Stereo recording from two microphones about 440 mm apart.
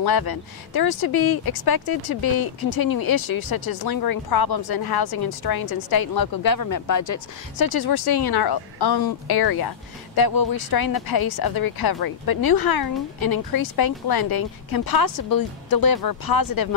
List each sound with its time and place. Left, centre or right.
0.0 s speech: left